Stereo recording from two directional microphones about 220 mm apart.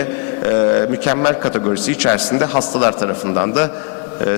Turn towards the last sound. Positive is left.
turn(degrees=25)  # may be behind; listen again after turning